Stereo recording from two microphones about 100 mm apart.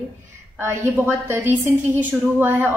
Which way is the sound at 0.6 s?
20° right (ahead or behind).